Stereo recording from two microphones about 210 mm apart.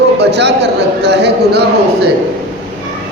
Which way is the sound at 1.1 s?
55° right (ahead or behind).